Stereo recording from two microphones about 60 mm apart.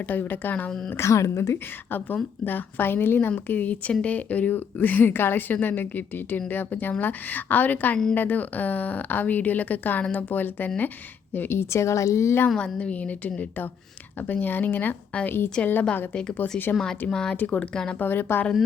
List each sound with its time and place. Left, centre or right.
0.1 s speech: left
0.9 s speech: left
2.4 s a woman's voice: left
12.5 s a woman's voice: centre
16.7 s speech: centre
17.3 s speech: left
18.0 s a woman's voice: left